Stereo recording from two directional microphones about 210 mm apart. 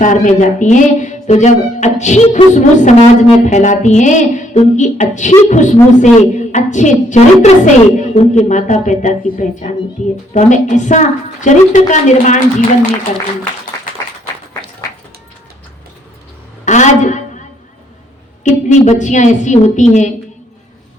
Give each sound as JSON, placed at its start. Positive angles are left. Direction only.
{"t": 0.0, "sound": "speech", "side_deg": 35}
{"t": 16.6, "sound": "a sound", "side_deg": 35}
{"t": 18.4, "sound": "speech", "side_deg": 35}